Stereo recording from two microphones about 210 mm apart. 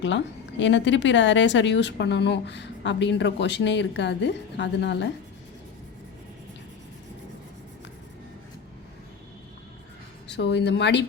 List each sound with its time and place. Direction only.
0.6 s a woman's voice: 60° left (ahead or behind)
10.2 s a woman's voice: 55° left (ahead or behind)